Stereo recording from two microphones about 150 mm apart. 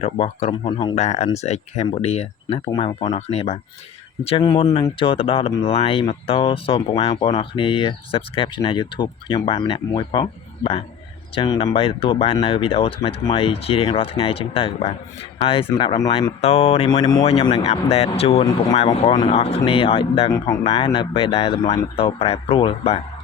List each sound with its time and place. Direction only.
0.0 s speech: 45° left (ahead or behind)
0.5 s speech: 30° left (ahead or behind)
0.9 s speech: 45° left (ahead or behind)